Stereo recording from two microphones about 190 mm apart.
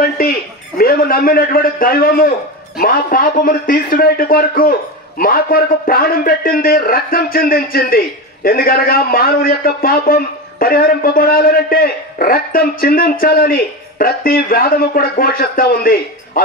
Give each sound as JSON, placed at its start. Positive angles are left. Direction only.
{"t": 0.7, "sound": "a man's voice", "side_deg": 50}